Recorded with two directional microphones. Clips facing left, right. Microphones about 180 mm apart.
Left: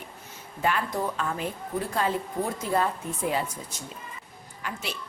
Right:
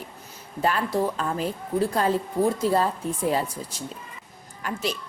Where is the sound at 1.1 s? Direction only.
35° right (ahead or behind).